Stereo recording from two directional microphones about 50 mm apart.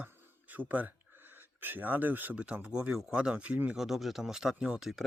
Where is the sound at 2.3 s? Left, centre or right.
Right.